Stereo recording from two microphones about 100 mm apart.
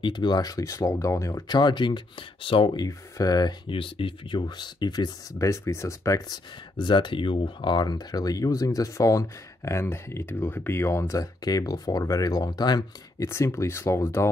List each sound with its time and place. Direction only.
0.0 s speech: 50° left (ahead or behind); by 1.4 s 30° left (ahead or behind)
1.5 s speech: 50° left (ahead or behind)
2.9 s speech: 40° left (ahead or behind)
3.7 s speech: 60° left (ahead or behind); by 12.8 s 45° left (ahead or behind)
13.2 s speech: 30° left (ahead or behind)